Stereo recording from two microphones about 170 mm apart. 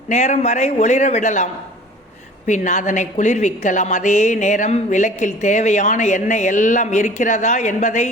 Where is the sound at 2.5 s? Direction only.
45° left (ahead or behind).